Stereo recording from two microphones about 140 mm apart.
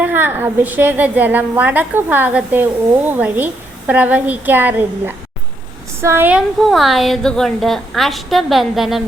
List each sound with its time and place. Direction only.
0.0 s a woman's voice: 15° right (ahead or behind)
6.6 s a woman's voice: centre (ahead or behind)